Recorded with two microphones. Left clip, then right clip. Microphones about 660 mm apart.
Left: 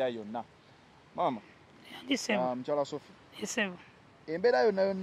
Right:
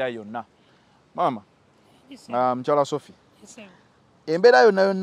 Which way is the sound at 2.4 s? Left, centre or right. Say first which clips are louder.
Right 11 dB; right.